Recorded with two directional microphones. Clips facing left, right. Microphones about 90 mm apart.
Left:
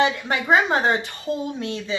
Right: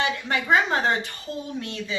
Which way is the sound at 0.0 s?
20° left (ahead or behind).